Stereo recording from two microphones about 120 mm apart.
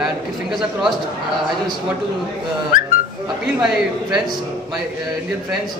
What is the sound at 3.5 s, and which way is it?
Speech, 5° right (ahead or behind).